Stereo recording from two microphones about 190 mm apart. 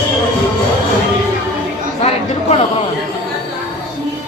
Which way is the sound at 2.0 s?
35° left (ahead or behind).